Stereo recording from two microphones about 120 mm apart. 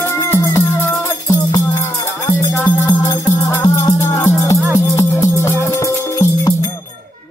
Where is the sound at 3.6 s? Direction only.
30° left (ahead or behind).